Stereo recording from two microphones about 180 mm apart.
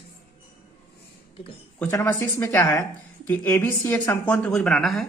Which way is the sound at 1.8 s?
10° left (ahead or behind).